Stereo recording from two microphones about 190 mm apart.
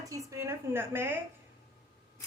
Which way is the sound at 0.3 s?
15° right (ahead or behind).